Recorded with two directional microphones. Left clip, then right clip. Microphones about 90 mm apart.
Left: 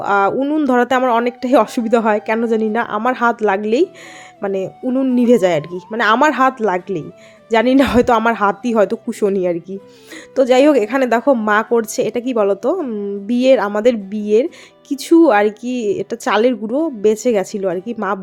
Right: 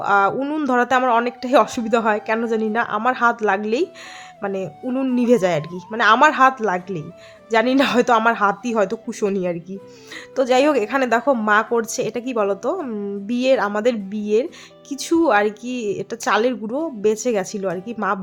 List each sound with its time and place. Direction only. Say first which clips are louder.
0.0 s a woman's voice: left 2 dB; 25° left (ahead or behind)
0.3 s speech: left 6 dB; 10° left (ahead or behind)
0.6 s a woman's voice: left 2 dB; 25° left (ahead or behind)
12.8 s speech: left 5 dB; 15° left (ahead or behind)
13.2 s a woman's voice: left 5 dB; 30° left (ahead or behind)